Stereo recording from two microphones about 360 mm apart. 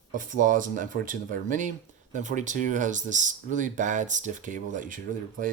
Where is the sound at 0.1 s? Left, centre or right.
Right.